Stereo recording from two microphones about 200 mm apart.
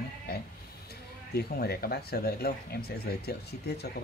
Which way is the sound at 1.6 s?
50° left (ahead or behind).